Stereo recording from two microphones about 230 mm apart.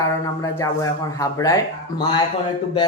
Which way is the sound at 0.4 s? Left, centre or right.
Centre.